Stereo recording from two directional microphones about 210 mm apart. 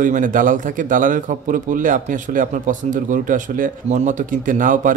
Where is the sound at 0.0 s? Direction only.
40° right (ahead or behind).